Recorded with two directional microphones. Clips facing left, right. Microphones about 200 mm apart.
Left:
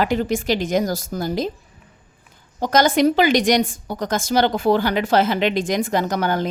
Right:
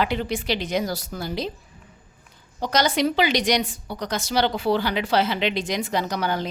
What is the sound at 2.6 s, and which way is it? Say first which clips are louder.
A woman's voice: left 5 dB; 50° left (ahead or behind).